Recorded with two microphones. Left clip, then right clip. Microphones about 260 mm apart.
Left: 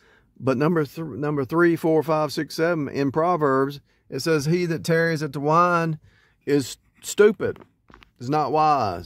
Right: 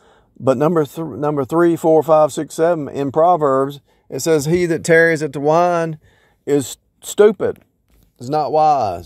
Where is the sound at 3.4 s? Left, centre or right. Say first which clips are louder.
Right 5 dB; centre.